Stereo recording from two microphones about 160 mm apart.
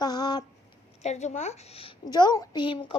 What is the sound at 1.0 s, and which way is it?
Speech, 45° left (ahead or behind).